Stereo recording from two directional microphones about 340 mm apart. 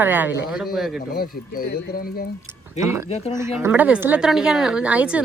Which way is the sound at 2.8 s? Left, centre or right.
Centre.